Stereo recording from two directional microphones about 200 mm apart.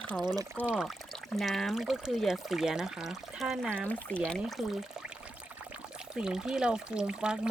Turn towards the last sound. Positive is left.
turn(degrees=-5)  # may be behind; listen again after turning